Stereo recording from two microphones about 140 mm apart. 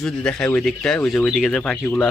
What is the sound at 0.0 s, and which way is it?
Speech, 5° left (ahead or behind).